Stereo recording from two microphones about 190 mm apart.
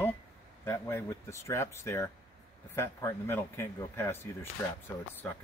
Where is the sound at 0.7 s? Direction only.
15° left (ahead or behind).